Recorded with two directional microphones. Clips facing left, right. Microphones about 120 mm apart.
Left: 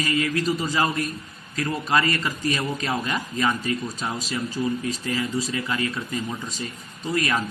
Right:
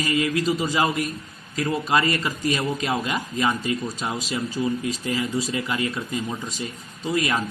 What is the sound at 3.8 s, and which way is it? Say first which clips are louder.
A man's voice: right 1 dB; 10° right (ahead or behind).